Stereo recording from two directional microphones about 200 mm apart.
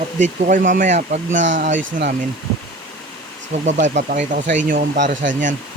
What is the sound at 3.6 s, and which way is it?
Speech, 40° right (ahead or behind).